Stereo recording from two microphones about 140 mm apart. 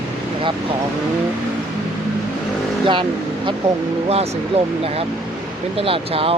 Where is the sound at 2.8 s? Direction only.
35° right (ahead or behind).